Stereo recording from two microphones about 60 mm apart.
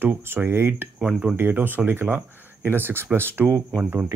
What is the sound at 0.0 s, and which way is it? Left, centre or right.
Speech, right.